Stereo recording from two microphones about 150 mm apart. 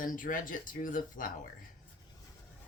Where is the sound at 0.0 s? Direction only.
65° left (ahead or behind).